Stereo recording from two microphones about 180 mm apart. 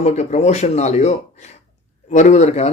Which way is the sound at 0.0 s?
40° left (ahead or behind).